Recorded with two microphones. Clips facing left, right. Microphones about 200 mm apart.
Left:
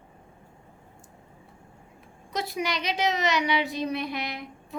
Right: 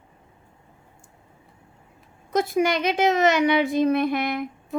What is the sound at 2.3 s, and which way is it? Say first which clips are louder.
A woman's voice: right 9 dB; 50° right (ahead or behind).